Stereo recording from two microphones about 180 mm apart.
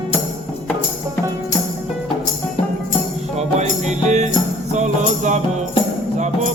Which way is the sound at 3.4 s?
40° right (ahead or behind).